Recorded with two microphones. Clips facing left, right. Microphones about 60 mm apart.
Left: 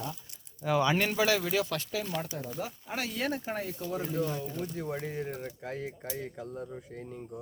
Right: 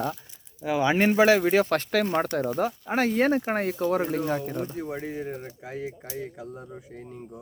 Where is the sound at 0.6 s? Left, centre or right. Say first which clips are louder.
Right 2 dB; centre.